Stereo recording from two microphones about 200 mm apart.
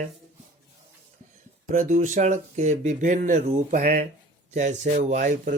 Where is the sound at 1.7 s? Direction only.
40° right (ahead or behind).